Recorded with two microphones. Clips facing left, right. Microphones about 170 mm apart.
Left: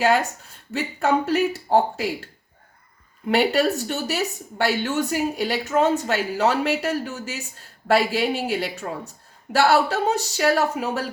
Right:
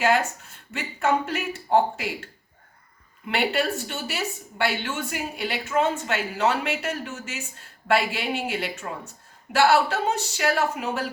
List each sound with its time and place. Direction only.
0.0 s a woman's voice: 35° left (ahead or behind)